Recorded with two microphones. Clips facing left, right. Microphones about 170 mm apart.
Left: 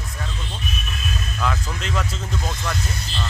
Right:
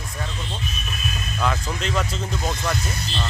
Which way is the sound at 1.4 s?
Centre (ahead or behind).